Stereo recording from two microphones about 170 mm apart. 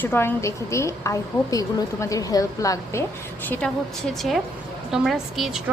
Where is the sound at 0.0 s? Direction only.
10° left (ahead or behind).